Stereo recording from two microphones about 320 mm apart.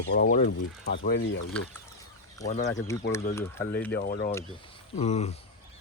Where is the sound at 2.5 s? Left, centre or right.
Left.